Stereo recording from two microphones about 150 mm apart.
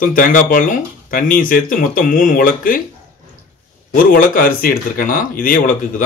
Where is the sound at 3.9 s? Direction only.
70° left (ahead or behind).